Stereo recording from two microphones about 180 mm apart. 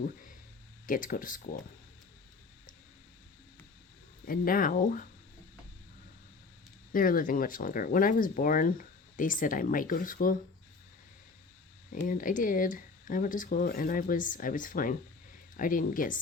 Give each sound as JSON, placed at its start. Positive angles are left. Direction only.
{"t": 0.9, "sound": "speech", "side_deg": 50}
{"t": 4.3, "sound": "speech", "side_deg": 50}
{"t": 6.9, "sound": "speech", "side_deg": 50}
{"t": 11.9, "sound": "speech", "side_deg": 50}